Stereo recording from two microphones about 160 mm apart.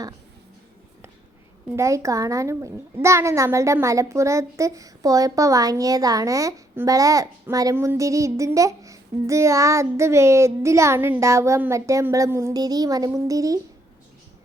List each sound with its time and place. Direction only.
1.7 s a child's voice: 20° right (ahead or behind)